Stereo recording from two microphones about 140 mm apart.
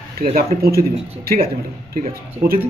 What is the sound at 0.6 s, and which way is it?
Speech, 90° right.